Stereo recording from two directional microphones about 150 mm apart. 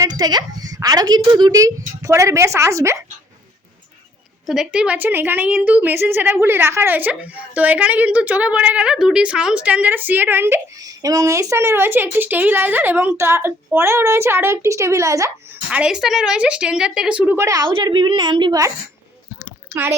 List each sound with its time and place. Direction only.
0.0 s a woman's voice: 25° right (ahead or behind)
4.4 s a woman's voice: 5° right (ahead or behind); by 15.3 s 20° right (ahead or behind)
15.7 s a woman's voice: 5° right (ahead or behind); by 17.7 s 20° right (ahead or behind)
17.7 s a woman's voice: 35° right (ahead or behind)